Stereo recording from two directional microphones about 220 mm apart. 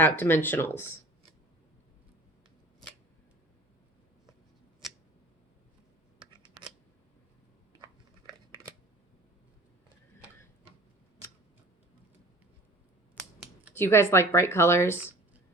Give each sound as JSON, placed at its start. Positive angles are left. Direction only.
{"t": 0.0, "sound": "speech", "side_deg": 10}
{"t": 4.8, "sound": "tick", "side_deg": 0}
{"t": 6.1, "sound": "scissors", "side_deg": -20}
{"t": 13.7, "sound": "speech", "side_deg": 10}